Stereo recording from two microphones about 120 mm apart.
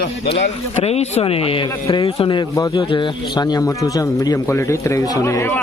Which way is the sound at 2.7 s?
45° left (ahead or behind).